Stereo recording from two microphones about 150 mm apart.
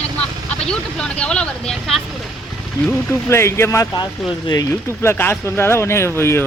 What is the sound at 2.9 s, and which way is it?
A woman's voice, 15° left (ahead or behind).